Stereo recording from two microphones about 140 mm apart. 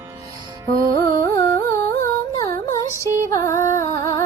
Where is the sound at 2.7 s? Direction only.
20° left (ahead or behind).